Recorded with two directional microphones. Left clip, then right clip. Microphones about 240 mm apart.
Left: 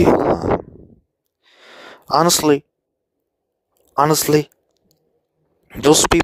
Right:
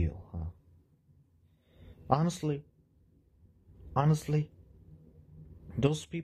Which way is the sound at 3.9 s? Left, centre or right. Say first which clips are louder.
Left 18 dB; left.